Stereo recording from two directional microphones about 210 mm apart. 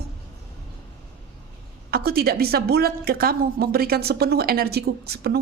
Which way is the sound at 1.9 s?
45° right (ahead or behind).